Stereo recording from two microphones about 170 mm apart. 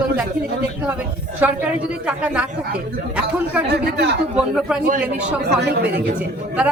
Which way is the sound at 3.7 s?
80° right.